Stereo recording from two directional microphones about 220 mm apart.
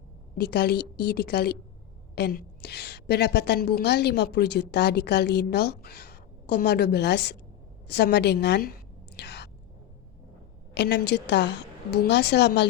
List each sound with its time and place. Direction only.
0.3 s a woman's voice: 50° left (ahead or behind)
9.1 s whispering: 50° left (ahead or behind)
10.8 s a woman's voice: 50° left (ahead or behind)